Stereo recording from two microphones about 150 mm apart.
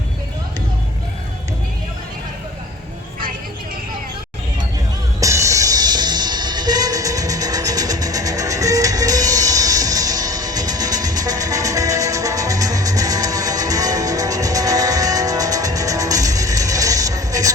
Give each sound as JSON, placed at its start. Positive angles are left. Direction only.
{"t": 5.2, "sound": "music", "side_deg": -20}